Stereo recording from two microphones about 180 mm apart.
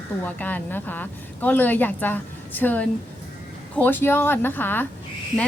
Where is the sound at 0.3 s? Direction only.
10° left (ahead or behind).